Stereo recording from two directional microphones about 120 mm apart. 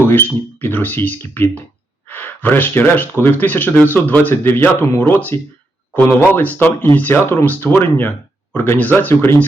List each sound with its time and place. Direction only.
0.0 s speech: 20° left (ahead or behind)